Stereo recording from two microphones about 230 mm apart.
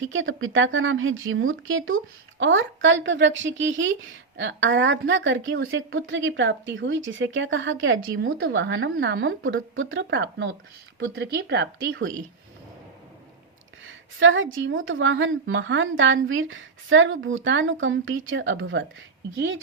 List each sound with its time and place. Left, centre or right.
0.1 s speech: right
13.8 s speech: right